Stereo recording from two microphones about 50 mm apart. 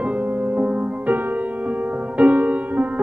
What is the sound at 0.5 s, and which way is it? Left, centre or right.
Music, right.